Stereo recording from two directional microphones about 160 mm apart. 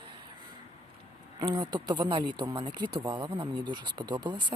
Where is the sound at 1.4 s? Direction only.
30° right (ahead or behind).